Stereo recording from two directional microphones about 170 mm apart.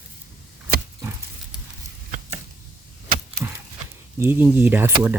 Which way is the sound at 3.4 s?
15° right (ahead or behind).